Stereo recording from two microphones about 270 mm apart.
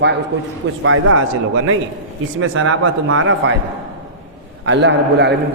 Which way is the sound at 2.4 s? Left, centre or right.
Right.